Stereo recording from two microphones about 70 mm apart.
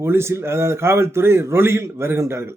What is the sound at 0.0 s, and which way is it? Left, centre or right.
A man's voice, right.